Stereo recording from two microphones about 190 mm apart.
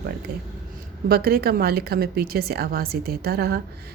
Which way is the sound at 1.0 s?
55° right (ahead or behind).